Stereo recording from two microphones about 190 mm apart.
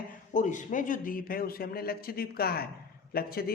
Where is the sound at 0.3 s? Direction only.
40° left (ahead or behind).